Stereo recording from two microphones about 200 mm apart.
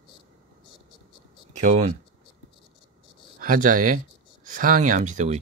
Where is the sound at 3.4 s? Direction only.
40° right (ahead or behind).